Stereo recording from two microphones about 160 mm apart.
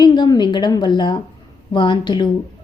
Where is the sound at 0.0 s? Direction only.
25° left (ahead or behind).